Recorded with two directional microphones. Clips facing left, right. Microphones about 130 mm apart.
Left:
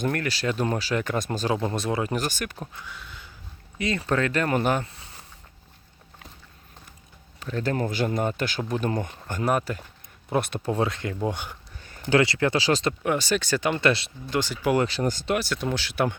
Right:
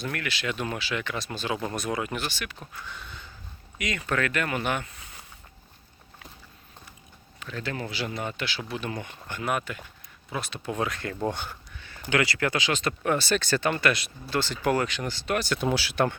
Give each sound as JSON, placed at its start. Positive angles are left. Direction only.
{"t": 0.0, "sound": "speech", "side_deg": 40}
{"t": 1.6, "sound": "speech", "side_deg": 25}
{"t": 2.8, "sound": "a sound", "side_deg": 5}
{"t": 3.8, "sound": "speech", "side_deg": 30}
{"t": 7.3, "sound": "speech", "side_deg": 40}
{"t": 10.2, "sound": "speech", "side_deg": 55}
{"t": 10.7, "sound": "speech", "side_deg": 30}
{"t": 11.8, "sound": "a sound", "side_deg": 40}
{"t": 12.1, "sound": "speech", "side_deg": 25}
{"t": 13.0, "sound": "speech", "side_deg": 15}
{"t": 13.8, "sound": "speech", "side_deg": 25}
{"t": 14.3, "sound": "speech", "side_deg": 10}
{"t": 14.8, "sound": "speech", "side_deg": 35}
{"t": 15.4, "sound": "speech", "side_deg": 0}